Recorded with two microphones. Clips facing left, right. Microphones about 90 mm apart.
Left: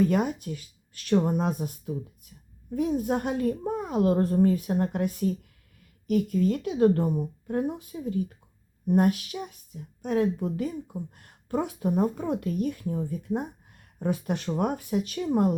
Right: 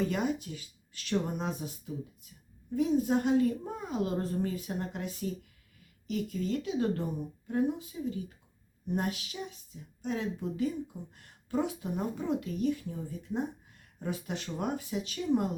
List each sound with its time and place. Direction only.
0.0 s speech: 50° left (ahead or behind)